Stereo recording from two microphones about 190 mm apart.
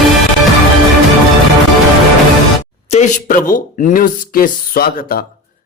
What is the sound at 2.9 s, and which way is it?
Speech, 40° left (ahead or behind).